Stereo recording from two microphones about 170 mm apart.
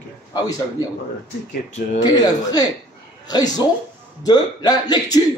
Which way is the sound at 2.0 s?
20° left (ahead or behind).